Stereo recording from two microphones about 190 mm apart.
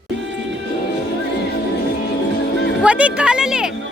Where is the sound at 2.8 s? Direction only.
5° right (ahead or behind).